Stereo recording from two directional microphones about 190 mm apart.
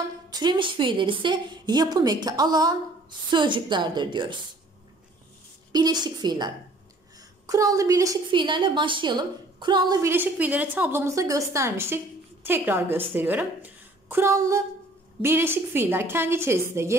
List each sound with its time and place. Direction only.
0.3 s a woman's voice: 25° right (ahead or behind)
5.7 s a woman's voice: 20° right (ahead or behind)
10.1 s a woman's voice: 10° right (ahead or behind)